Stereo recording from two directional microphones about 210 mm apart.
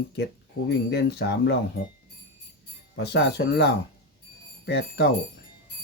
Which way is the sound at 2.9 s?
55° left (ahead or behind).